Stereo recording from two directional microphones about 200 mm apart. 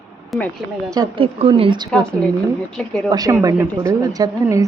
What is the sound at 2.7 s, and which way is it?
Speech, 5° left (ahead or behind).